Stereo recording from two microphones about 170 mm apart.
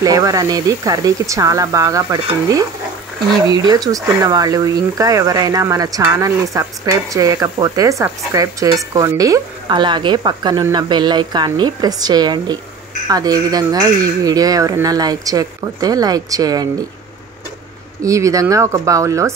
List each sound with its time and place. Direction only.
0.0 s speech: 20° right (ahead or behind)
18.0 s speech: 20° right (ahead or behind)